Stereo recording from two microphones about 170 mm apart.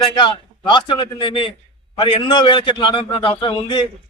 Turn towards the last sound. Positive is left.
turn(degrees=30)  # may be behind; listen again after turning